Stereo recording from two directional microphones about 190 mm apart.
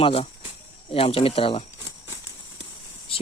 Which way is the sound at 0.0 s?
30° left (ahead or behind).